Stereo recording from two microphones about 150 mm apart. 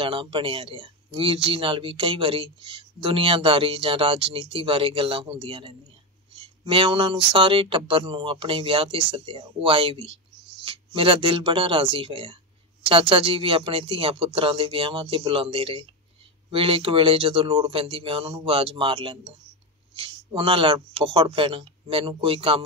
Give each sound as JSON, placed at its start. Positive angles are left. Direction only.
{"t": 0.0, "sound": "speech", "side_deg": -35}
{"t": 6.3, "sound": "a sound", "side_deg": -35}
{"t": 7.3, "sound": "speech", "side_deg": -35}